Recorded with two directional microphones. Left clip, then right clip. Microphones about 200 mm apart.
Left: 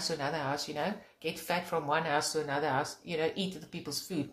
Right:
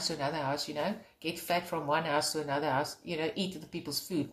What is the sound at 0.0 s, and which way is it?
Speech, 5° left (ahead or behind).